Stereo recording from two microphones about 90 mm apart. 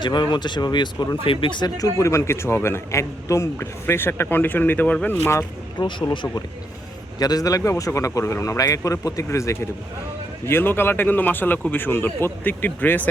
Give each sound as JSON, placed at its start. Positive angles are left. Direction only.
{"t": 0.0, "sound": "speech", "side_deg": 55}
{"t": 1.2, "sound": "speech", "side_deg": 80}
{"t": 1.8, "sound": "a man's voice", "side_deg": 35}
{"t": 5.1, "sound": "a man's voice", "side_deg": 30}